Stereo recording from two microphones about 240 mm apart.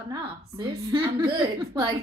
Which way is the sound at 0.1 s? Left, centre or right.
Centre.